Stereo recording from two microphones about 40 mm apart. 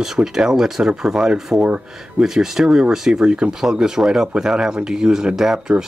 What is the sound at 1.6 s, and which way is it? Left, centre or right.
Speech, right.